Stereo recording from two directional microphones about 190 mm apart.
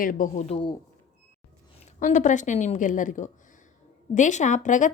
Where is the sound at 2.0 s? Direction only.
40° left (ahead or behind).